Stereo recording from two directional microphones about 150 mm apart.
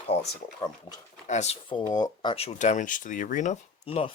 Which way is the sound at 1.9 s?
30° left (ahead or behind).